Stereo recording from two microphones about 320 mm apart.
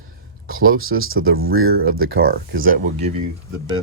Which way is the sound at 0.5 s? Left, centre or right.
Right.